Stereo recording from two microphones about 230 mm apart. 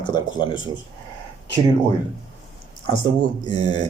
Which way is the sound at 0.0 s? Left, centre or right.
Centre.